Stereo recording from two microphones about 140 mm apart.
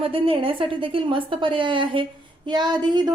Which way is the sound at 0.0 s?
40° right (ahead or behind).